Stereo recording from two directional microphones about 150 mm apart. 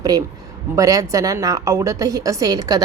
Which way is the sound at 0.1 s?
25° right (ahead or behind).